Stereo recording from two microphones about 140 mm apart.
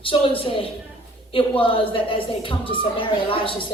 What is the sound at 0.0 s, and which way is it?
Speech, 40° left (ahead or behind).